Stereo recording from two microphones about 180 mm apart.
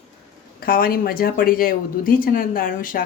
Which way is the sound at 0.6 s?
55° left (ahead or behind).